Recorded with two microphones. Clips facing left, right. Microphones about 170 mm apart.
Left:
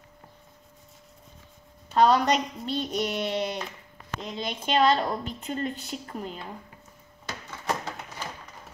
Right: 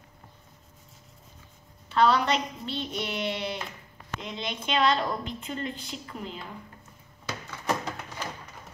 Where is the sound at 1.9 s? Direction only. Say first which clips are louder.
Left 2 dB; 45° left (ahead or behind).